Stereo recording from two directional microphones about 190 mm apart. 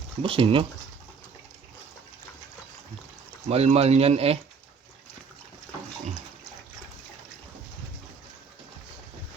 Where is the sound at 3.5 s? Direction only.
35° right (ahead or behind).